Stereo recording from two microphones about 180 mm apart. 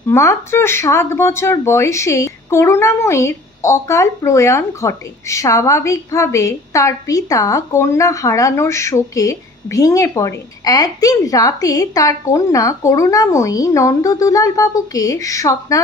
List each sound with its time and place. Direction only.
0.1 s speech: 15° left (ahead or behind)